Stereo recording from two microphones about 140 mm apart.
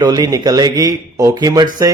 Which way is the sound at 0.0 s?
30° right (ahead or behind).